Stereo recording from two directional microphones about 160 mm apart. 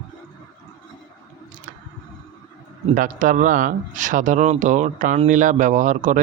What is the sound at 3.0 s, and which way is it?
Speech, 55° right (ahead or behind).